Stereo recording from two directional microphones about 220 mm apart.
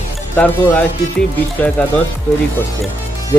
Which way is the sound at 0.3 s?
10° left (ahead or behind).